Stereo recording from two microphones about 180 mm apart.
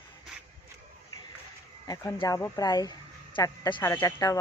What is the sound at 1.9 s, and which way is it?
Speech, 20° left (ahead or behind).